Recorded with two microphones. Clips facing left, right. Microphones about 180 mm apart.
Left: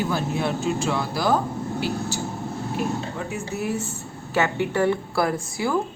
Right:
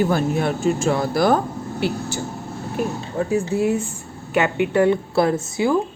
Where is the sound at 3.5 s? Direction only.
25° right (ahead or behind).